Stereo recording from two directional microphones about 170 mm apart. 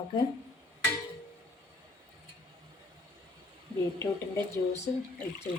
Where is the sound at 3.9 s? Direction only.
15° left (ahead or behind).